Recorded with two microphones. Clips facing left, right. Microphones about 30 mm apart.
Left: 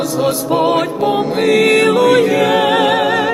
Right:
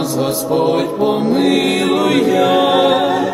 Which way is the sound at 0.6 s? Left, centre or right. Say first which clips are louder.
Left 2 dB; left.